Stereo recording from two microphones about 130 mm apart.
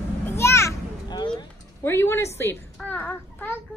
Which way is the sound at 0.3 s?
20° left (ahead or behind).